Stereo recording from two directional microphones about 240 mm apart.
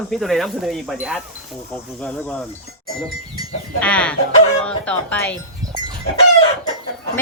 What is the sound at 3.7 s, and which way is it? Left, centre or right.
Wind chime, centre.